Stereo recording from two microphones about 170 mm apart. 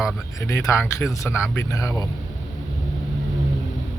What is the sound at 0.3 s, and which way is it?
Speech, 20° left (ahead or behind).